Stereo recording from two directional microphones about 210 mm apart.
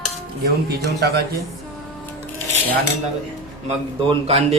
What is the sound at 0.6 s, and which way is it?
Speech, 50° right (ahead or behind).